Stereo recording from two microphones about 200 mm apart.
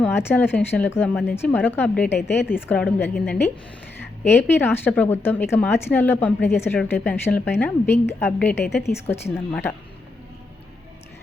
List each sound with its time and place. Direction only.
0.0 s a woman's voice: 10° left (ahead or behind)
8.5 s a woman's voice: 55° left (ahead or behind)
8.8 s a woman's voice: 10° left (ahead or behind)